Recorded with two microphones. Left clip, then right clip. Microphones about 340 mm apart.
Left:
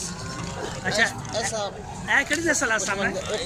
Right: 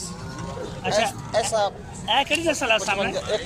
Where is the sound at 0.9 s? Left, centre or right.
Centre.